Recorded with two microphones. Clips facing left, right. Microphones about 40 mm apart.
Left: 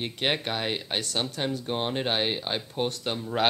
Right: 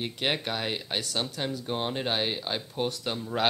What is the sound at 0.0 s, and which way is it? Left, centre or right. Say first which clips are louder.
A man's voice: left 1 dB; centre.